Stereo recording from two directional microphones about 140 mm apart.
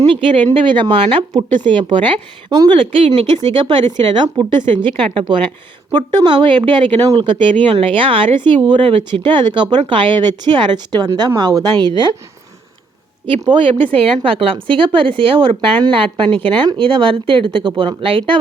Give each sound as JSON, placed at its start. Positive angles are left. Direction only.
{"t": 0.1, "sound": "speech", "side_deg": -35}
{"t": 13.4, "sound": "speech", "side_deg": -35}